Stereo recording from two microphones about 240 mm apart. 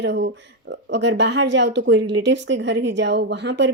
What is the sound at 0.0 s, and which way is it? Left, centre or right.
A woman's voice, right.